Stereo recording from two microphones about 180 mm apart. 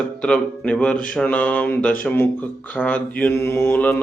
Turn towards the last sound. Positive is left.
turn(degrees=10)  # may be behind; listen again after turning